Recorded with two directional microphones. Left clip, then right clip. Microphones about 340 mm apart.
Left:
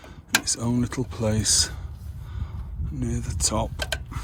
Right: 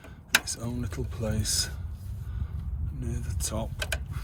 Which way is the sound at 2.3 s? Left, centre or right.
Left.